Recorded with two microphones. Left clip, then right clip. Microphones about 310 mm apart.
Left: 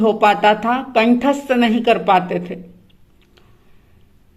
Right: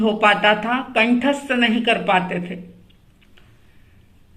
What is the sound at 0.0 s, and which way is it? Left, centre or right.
A woman's voice, left.